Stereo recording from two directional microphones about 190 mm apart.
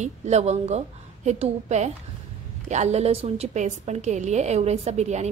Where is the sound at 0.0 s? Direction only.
35° right (ahead or behind).